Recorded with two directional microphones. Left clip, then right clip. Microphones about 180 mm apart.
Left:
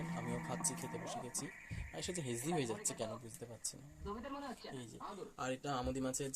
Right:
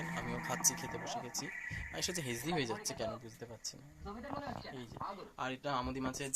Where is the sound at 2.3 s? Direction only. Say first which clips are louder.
Left 1 dB; 10° left (ahead or behind).